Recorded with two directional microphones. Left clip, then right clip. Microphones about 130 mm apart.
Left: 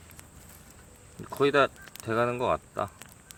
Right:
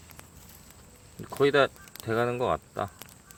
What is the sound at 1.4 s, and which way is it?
Speech, 25° right (ahead or behind).